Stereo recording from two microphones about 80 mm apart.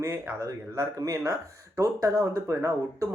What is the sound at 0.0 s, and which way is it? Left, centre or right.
Speech, right.